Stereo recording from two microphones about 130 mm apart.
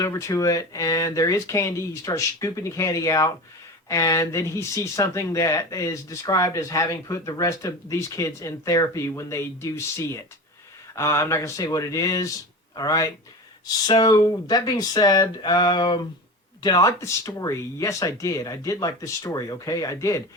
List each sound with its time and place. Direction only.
0.0 s speech: 25° left (ahead or behind)